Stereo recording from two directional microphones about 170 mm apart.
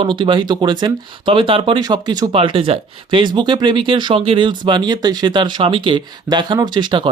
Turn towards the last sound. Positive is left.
turn(degrees=-30)  # may be behind; listen again after turning